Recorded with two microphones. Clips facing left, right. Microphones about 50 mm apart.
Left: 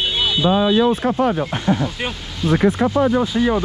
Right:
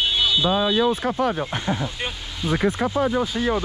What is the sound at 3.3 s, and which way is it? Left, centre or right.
Speech, left.